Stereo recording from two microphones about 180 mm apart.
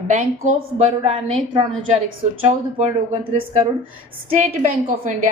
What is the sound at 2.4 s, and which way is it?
Speech, 35° right (ahead or behind).